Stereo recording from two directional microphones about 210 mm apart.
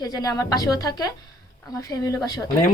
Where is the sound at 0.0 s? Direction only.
20° left (ahead or behind).